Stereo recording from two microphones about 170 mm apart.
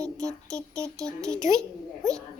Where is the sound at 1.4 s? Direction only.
20° right (ahead or behind).